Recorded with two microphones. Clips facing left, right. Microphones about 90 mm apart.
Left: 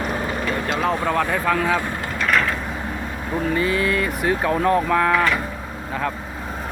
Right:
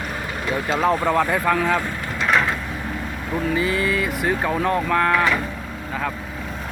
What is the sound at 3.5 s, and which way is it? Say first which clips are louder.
Speech: left 1 dB; centre (ahead or behind).